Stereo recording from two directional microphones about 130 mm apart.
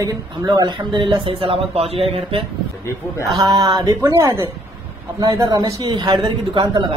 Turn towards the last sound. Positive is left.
turn(degrees=-40)  # may be behind; listen again after turning